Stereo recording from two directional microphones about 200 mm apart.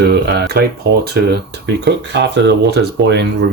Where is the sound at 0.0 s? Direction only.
55° right (ahead or behind).